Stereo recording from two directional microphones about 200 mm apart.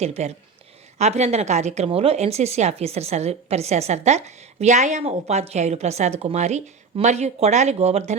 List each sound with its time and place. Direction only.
0.0 s a woman's voice: 30° right (ahead or behind)